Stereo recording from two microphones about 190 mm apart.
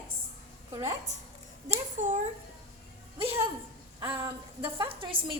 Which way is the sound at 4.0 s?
15° right (ahead or behind).